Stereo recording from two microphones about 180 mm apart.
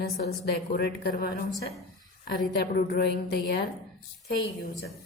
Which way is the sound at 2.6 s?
60° left (ahead or behind).